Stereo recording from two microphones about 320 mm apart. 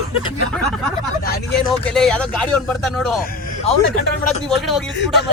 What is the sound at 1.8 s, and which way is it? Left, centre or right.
Speech, centre.